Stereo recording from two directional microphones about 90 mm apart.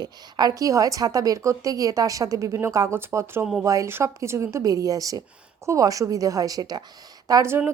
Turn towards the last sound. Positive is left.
turn(degrees=-25)  # may be behind; listen again after turning